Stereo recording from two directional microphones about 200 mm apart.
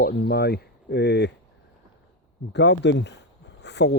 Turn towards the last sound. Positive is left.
turn(degrees=60)  # may be behind; listen again after turning